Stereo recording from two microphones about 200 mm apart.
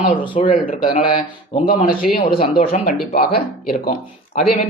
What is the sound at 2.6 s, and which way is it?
Speech, 35° left (ahead or behind).